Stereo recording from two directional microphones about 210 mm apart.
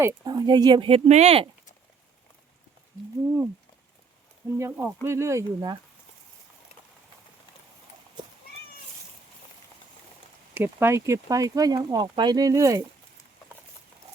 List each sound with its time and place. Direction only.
0.0 s speech: 15° right (ahead or behind)
4.5 s speech: 10° right (ahead or behind)
10.5 s speech: 10° right (ahead or behind)